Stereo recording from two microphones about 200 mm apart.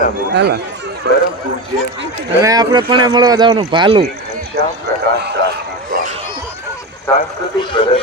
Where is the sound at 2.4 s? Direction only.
20° right (ahead or behind).